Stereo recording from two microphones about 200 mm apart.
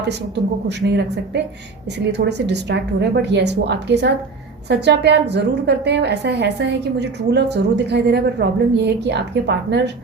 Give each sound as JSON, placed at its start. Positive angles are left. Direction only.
{"t": 0.7, "sound": "a woman's voice", "side_deg": -60}